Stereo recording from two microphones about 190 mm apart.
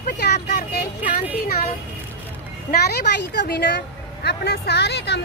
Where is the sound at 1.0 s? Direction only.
40° left (ahead or behind).